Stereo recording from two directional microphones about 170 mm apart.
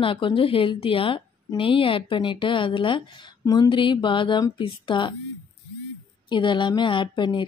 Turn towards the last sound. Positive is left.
turn(degrees=25)  # may be behind; listen again after turning